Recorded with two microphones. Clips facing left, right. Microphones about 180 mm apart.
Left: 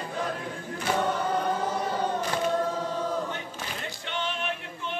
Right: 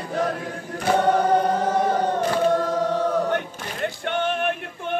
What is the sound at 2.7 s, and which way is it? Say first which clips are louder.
Choir: right 7 dB; 70° right (ahead or behind).